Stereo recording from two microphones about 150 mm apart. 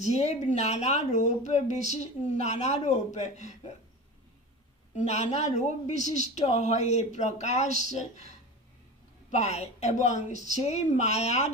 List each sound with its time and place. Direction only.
0.0 s speech: 50° left (ahead or behind)
4.9 s speech: 50° left (ahead or behind)
9.3 s speech: 45° left (ahead or behind)